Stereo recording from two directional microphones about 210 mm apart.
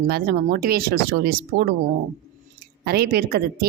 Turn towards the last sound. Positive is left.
turn(degrees=-45)  # may be behind; listen again after turning